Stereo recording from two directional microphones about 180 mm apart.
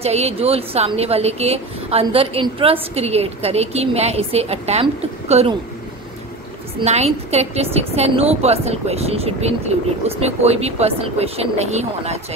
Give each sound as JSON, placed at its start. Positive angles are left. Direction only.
{"t": 0.0, "sound": "a woman's voice", "side_deg": -35}
{"t": 6.8, "sound": "a woman's voice", "side_deg": -35}